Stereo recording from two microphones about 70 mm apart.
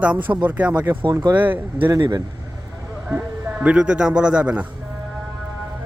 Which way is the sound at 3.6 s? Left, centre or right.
Centre.